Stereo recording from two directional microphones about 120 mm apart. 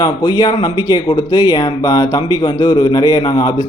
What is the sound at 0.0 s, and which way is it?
Speech, 35° left (ahead or behind).